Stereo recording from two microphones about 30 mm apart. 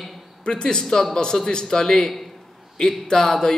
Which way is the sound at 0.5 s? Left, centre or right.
Left.